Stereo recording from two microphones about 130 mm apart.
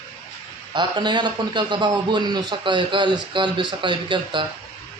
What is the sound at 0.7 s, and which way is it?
A man's voice, 35° right (ahead or behind).